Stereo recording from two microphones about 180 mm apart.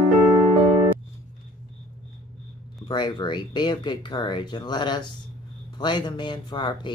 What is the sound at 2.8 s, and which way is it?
Speech, 25° left (ahead or behind).